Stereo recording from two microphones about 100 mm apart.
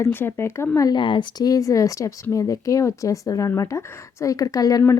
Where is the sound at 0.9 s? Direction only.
55° left (ahead or behind).